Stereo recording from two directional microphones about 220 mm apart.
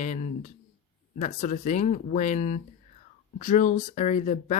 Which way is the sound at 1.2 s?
30° left (ahead or behind).